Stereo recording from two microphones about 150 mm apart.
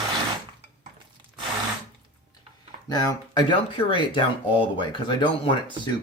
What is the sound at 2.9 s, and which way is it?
Speech, 25° left (ahead or behind).